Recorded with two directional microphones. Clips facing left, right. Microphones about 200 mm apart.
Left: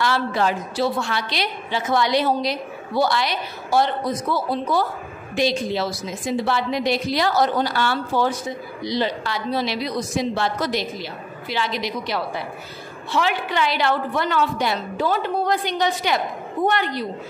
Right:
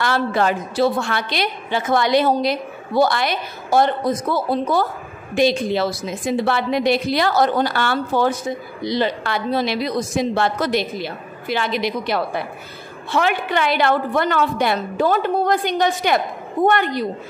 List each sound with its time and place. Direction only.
0.0 s a woman's voice: 55° right (ahead or behind)